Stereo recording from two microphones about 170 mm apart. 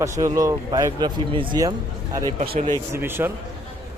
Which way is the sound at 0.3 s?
20° right (ahead or behind).